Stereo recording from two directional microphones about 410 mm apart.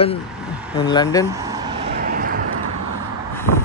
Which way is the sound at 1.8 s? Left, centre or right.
Right.